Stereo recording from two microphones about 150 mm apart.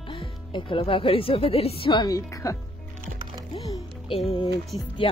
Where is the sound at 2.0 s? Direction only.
20° left (ahead or behind).